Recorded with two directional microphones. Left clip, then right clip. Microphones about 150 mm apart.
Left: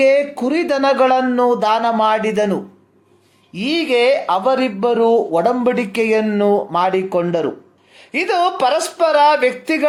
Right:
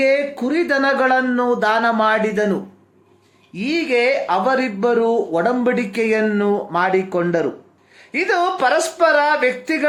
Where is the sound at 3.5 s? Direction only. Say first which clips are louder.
Left 2 dB; 40° left (ahead or behind).